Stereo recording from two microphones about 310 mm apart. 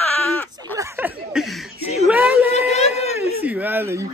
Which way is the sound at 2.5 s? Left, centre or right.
Left.